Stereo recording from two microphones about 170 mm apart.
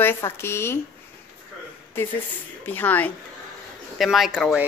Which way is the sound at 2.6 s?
10° left (ahead or behind).